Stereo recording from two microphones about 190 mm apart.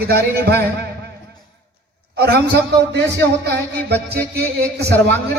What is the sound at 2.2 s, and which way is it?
A man's voice, 60° right (ahead or behind).